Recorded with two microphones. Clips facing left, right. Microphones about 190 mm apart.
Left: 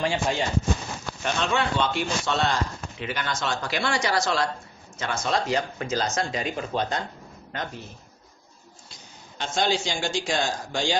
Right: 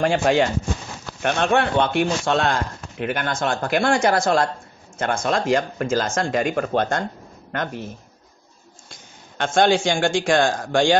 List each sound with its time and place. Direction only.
0.0 s speech: 60° right (ahead or behind)
1.2 s speech: 55° right (ahead or behind)
8.9 s a man's voice: 55° right (ahead or behind)